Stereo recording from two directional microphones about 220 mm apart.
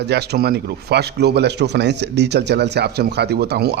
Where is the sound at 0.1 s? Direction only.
50° right (ahead or behind).